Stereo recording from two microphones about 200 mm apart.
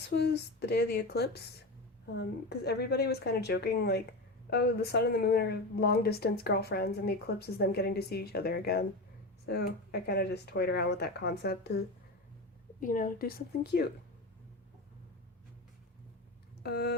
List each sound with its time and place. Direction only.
0.1 s a woman's voice: 55° left (ahead or behind)
12.8 s a woman's voice: 45° left (ahead or behind)
16.6 s a woman's voice: 55° left (ahead or behind)